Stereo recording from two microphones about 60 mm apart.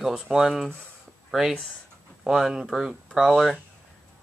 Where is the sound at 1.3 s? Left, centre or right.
Centre.